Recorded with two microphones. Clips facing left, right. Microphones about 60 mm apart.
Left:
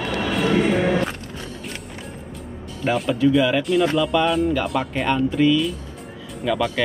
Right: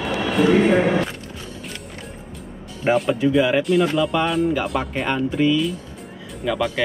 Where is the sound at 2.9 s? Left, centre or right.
Right.